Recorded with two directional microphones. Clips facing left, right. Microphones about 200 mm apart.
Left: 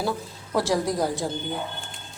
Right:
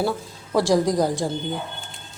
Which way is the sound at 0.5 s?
15° right (ahead or behind).